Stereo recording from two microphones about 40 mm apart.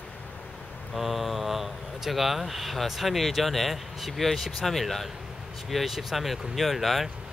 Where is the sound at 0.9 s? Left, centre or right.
Centre.